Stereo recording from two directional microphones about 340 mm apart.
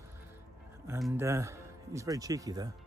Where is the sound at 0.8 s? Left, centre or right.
Centre.